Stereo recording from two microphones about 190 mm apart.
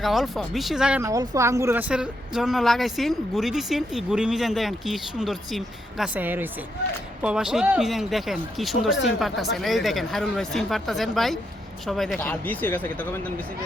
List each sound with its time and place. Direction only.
0.0 s speech: centre (ahead or behind)
1.0 s speech: 15° right (ahead or behind); by 13.1 s 10° left (ahead or behind)